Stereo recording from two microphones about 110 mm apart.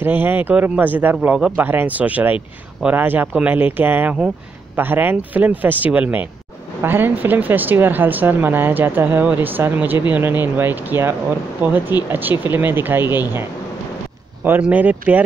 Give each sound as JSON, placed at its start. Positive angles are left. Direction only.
{"t": 0.0, "sound": "speech", "side_deg": -15}
{"t": 14.6, "sound": "speech", "side_deg": -15}